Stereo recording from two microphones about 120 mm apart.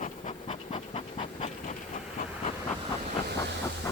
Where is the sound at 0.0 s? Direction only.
65° left (ahead or behind).